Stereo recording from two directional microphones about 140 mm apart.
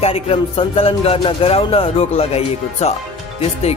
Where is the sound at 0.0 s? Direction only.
45° left (ahead or behind).